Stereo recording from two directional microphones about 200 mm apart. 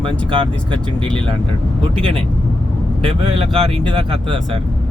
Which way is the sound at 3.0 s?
30° right (ahead or behind).